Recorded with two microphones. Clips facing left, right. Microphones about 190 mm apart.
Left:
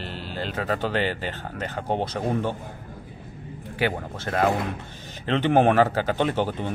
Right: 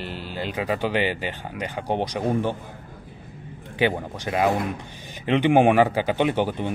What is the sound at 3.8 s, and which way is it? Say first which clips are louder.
Speech: right 3 dB; 10° right (ahead or behind).